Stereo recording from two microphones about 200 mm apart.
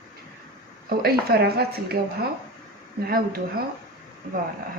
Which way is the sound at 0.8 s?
50° right (ahead or behind).